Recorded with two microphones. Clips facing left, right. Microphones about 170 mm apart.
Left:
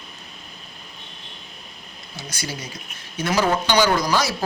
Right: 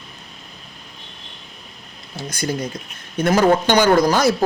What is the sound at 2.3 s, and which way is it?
A man's voice, 50° right (ahead or behind).